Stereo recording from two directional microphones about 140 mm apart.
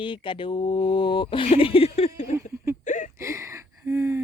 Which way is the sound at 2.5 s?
20° right (ahead or behind).